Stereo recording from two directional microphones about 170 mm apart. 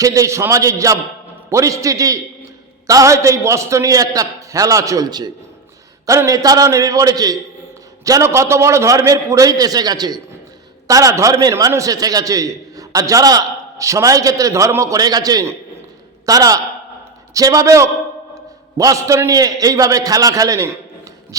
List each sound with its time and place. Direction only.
0.0 s a man's voice: 20° right (ahead or behind)